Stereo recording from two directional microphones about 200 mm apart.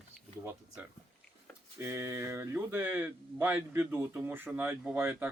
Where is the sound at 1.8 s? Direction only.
15° right (ahead or behind).